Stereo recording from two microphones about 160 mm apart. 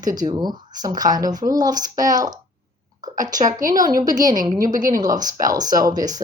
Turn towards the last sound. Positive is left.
turn(degrees=-25)  # may be behind; listen again after turning